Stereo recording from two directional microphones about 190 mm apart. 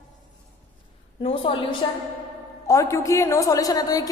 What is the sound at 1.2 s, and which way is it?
Speech, 30° left (ahead or behind).